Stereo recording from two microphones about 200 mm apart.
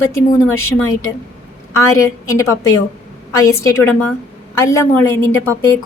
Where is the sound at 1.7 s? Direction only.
15° left (ahead or behind).